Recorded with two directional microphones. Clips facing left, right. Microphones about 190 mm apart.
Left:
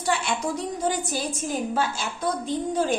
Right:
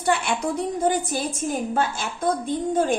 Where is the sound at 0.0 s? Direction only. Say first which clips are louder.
Right 3 dB; 60° right (ahead or behind).